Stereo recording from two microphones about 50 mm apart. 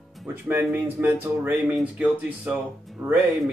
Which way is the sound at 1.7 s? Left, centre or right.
Right.